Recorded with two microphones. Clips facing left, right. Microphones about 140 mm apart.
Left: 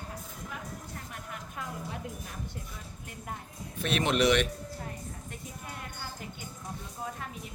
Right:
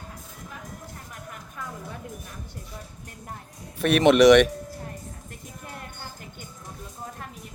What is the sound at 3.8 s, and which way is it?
Speech, 70° right (ahead or behind).